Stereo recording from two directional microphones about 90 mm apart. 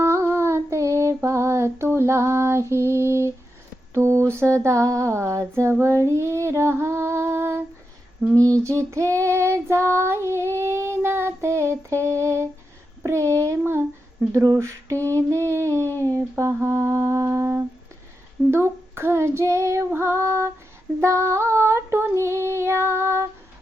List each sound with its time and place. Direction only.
0.0 s female singing: 30° right (ahead or behind)
3.9 s mantra: 35° right (ahead or behind)
5.8 s female singing: 30° right (ahead or behind)
8.4 s child singing: 40° right (ahead or behind)
13.0 s a sound: 30° right (ahead or behind)
13.4 s child singing: 30° right (ahead or behind)
14.3 s mantra: 35° right (ahead or behind)
16.4 s female singing: 30° right (ahead or behind)